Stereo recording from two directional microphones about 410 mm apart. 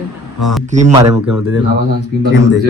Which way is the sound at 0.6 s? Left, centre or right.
Centre.